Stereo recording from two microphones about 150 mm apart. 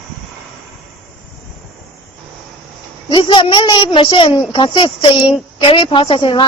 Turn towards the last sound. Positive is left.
turn(degrees=35)  # may be behind; listen again after turning